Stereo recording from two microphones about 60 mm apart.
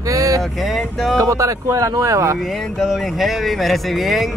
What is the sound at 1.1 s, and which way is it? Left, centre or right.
Speech, right.